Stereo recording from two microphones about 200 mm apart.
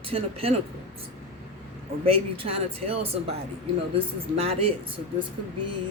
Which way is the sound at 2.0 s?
30° right (ahead or behind).